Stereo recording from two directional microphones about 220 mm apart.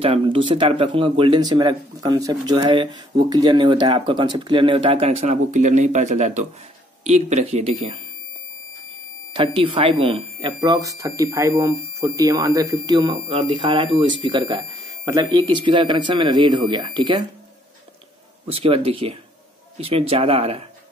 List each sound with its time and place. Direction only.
0.0 s speech: 25° right (ahead or behind)
9.3 s speech: 25° right (ahead or behind)
18.5 s speech: 25° right (ahead or behind)